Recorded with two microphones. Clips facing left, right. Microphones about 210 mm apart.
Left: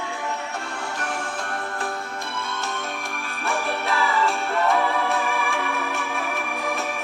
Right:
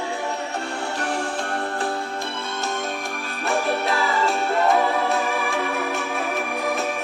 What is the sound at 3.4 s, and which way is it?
Music, 40° right (ahead or behind).